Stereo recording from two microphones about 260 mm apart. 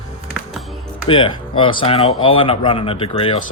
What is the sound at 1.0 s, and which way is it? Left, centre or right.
Speech, centre.